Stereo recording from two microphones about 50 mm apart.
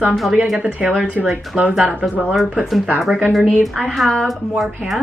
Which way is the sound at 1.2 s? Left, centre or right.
Centre.